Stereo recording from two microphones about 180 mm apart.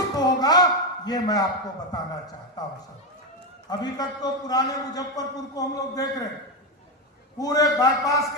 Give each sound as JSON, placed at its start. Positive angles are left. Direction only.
{"t": 0.2, "sound": "a sound", "side_deg": 20}
{"t": 1.9, "sound": "a man's voice", "side_deg": 20}
{"t": 7.3, "sound": "a man's voice", "side_deg": 20}